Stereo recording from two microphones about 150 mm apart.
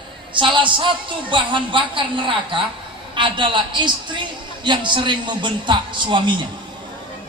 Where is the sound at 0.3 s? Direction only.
35° right (ahead or behind).